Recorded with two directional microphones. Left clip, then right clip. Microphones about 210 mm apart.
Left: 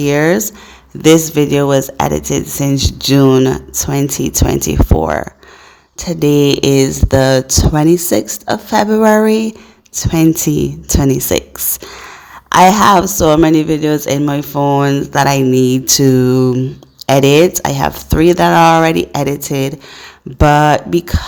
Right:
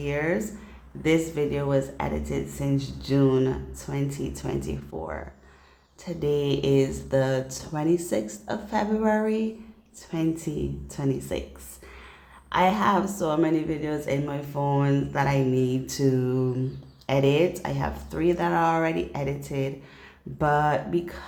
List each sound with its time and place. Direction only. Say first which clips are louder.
0.0 s speech: left 15 dB; 45° left (ahead or behind)